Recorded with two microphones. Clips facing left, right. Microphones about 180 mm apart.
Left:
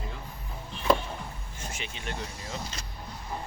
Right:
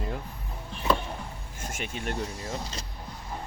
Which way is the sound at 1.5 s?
50° right (ahead or behind).